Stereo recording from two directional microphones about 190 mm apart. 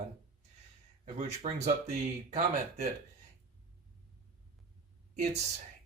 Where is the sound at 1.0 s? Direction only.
40° right (ahead or behind).